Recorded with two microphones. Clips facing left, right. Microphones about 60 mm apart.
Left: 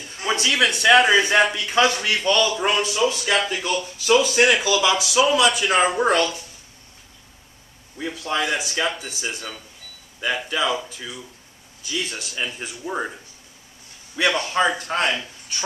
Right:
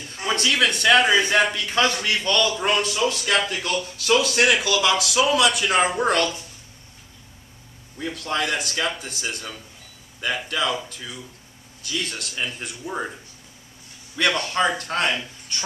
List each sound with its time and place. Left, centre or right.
0.0 s a man's voice: centre
8.0 s speech: centre